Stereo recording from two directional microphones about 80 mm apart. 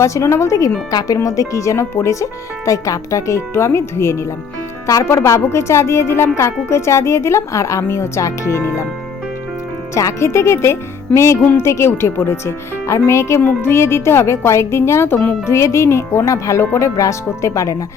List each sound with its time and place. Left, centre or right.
0.0 s speech: left
9.9 s speech: left
15.4 s speech: left